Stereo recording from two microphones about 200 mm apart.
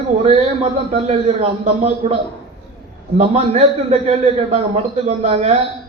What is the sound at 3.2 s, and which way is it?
A man's voice, 30° right (ahead or behind).